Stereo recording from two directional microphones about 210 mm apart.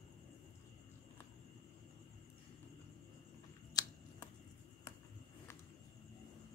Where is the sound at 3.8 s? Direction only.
15° left (ahead or behind).